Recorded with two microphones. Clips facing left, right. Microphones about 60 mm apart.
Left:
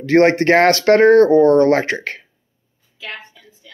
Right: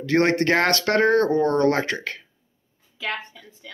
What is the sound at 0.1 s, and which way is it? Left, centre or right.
Speech, left.